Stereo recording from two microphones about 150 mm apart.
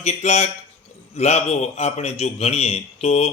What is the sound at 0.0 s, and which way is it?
A man's voice, 50° left (ahead or behind).